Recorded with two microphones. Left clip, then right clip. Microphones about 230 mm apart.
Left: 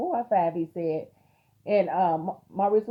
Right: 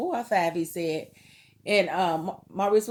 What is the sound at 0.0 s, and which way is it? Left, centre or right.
A woman's voice, right.